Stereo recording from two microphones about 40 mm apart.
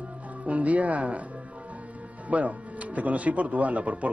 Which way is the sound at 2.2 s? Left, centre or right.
Right.